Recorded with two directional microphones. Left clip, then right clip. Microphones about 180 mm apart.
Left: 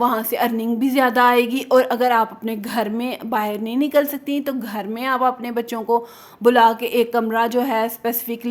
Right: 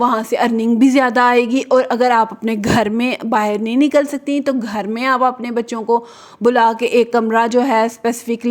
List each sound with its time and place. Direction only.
0.0 s a woman's voice: 25° right (ahead or behind)